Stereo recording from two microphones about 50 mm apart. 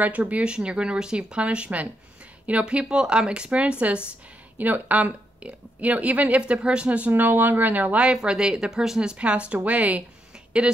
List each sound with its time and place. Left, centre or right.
0.0 s speech: right
4.6 s speech: right
7.1 s speech: right
8.0 s speech: centre